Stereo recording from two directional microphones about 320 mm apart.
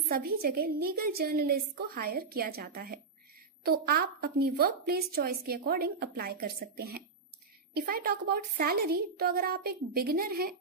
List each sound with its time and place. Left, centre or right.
0.1 s a woman's voice: right